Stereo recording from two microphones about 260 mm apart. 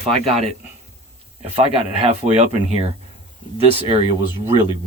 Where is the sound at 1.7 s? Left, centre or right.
Right.